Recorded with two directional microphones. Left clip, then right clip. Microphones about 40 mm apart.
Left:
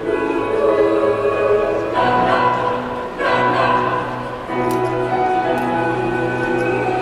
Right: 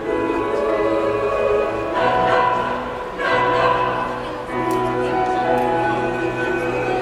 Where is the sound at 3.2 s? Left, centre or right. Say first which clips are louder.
Left 1 dB; centre.